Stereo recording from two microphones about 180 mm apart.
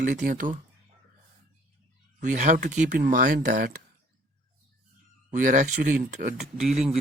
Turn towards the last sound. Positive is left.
turn(degrees=-35)  # may be behind; listen again after turning